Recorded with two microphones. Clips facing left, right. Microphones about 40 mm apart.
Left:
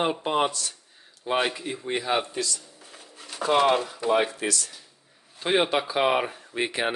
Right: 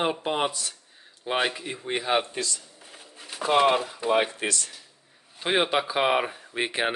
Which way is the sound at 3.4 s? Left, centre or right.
Centre.